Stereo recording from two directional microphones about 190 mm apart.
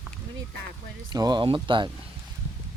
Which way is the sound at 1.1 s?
20° right (ahead or behind).